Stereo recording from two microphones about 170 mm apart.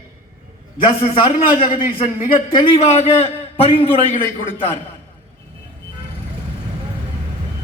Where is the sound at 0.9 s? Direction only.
30° left (ahead or behind).